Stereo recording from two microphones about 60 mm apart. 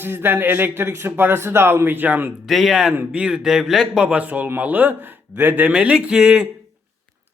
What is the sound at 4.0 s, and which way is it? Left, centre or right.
A man's voice, right.